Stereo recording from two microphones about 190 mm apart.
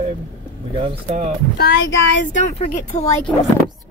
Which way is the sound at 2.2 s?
40° left (ahead or behind).